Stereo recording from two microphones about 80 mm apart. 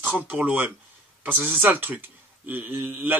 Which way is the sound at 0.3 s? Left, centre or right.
Centre.